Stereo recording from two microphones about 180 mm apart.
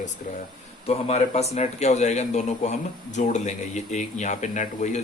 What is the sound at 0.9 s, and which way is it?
Speech, 35° left (ahead or behind).